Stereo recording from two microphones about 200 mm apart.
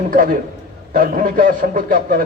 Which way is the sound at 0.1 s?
45° right (ahead or behind).